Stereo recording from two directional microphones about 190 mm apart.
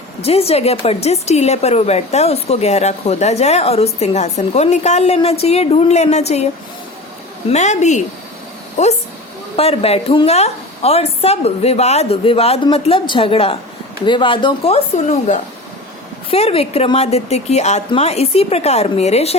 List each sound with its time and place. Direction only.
0.2 s a woman's voice: 30° left (ahead or behind)
7.5 s a woman's voice: 35° left (ahead or behind)